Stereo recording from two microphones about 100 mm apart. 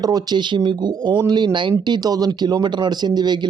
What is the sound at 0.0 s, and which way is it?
Speech, 40° right (ahead or behind).